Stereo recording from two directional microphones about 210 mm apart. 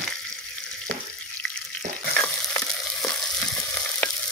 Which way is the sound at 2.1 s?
5° left (ahead or behind).